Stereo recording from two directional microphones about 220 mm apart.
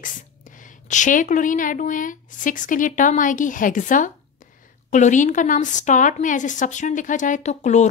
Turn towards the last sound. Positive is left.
turn(degrees=30)  # may be behind; listen again after turning